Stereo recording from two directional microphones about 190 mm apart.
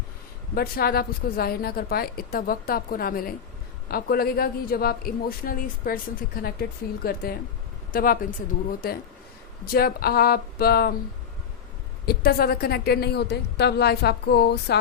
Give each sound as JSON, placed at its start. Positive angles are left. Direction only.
{"t": 0.5, "sound": "a man's voice", "side_deg": 55}
{"t": 9.6, "sound": "a man's voice", "side_deg": 50}
{"t": 12.0, "sound": "a woman's voice", "side_deg": 55}